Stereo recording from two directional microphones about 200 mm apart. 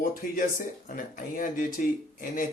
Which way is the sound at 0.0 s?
40° left (ahead or behind).